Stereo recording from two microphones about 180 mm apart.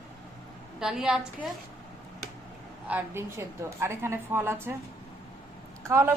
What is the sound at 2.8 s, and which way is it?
A woman's voice, 10° right (ahead or behind).